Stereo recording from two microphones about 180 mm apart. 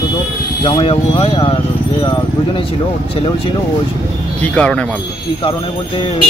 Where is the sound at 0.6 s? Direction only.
25° left (ahead or behind).